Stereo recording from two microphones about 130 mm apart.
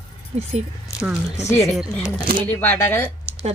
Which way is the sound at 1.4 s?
20° left (ahead or behind).